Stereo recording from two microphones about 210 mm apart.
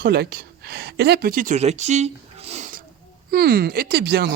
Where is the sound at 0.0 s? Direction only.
50° right (ahead or behind).